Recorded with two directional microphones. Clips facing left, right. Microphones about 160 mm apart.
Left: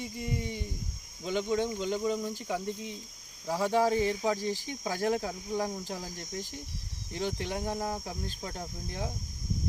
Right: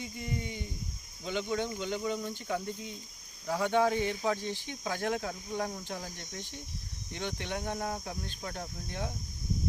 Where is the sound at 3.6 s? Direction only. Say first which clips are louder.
Left 2 dB; 30° left (ahead or behind).